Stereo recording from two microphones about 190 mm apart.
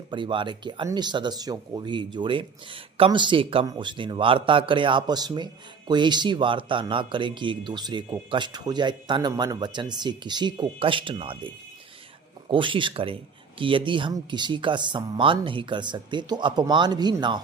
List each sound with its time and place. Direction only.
0.1 s speech: 25° right (ahead or behind)